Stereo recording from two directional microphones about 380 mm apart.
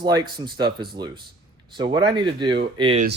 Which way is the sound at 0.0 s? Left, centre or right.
Centre.